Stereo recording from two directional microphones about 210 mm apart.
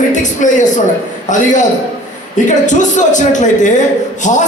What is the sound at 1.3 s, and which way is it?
Speech, 35° left (ahead or behind).